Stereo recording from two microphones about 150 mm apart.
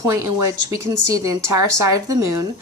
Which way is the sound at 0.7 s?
20° right (ahead or behind).